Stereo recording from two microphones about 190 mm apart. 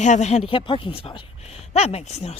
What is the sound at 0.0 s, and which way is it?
Speech, 40° left (ahead or behind).